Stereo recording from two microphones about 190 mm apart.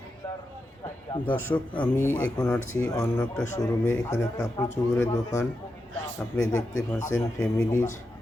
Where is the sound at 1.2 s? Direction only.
10° left (ahead or behind).